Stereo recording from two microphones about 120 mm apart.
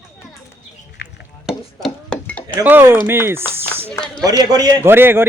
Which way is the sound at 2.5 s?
15° right (ahead or behind).